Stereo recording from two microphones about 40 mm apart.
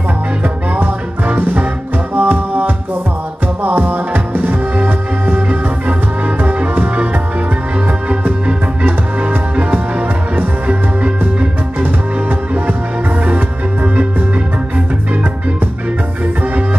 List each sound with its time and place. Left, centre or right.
1.3 s music: right
5.3 s music: right
8.5 s music: right
11.8 s music: right